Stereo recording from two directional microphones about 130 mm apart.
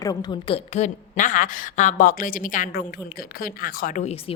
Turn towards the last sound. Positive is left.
turn(degrees=60)  # may be behind; listen again after turning